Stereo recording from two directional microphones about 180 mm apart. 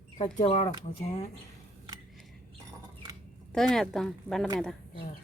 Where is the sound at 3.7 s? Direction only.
Centre (ahead or behind).